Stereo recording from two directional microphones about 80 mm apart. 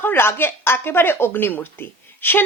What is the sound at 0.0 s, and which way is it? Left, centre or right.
A woman's voice, left.